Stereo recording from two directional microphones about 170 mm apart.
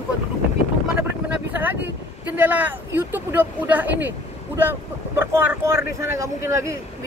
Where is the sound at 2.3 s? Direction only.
10° right (ahead or behind).